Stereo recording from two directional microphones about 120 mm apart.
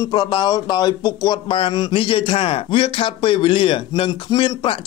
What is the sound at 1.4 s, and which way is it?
Speech, 45° left (ahead or behind).